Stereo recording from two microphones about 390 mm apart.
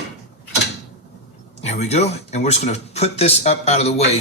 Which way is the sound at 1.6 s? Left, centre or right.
Centre.